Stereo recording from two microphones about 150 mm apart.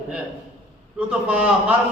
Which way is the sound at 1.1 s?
5° right (ahead or behind).